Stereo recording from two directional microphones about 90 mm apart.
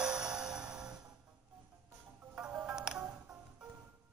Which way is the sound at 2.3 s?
10° right (ahead or behind).